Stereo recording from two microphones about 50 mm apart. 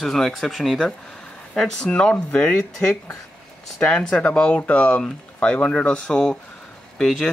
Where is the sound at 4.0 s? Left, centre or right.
Left.